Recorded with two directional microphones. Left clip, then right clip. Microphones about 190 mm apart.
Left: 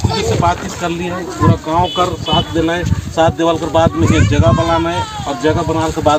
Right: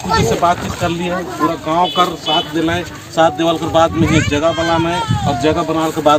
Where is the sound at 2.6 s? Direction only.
45° right (ahead or behind).